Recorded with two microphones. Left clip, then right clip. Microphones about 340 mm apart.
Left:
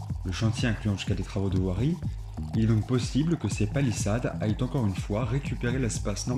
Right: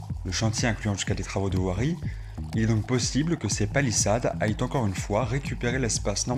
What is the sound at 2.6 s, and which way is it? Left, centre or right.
Speech, centre.